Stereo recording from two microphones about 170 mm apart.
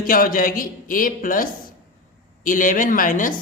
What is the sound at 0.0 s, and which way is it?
Speech, 55° left (ahead or behind).